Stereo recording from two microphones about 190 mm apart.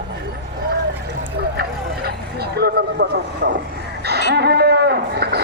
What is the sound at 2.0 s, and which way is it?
Vehicle, 55° right (ahead or behind).